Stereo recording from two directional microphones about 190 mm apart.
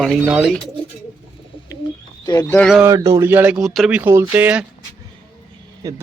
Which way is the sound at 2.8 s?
15° right (ahead or behind).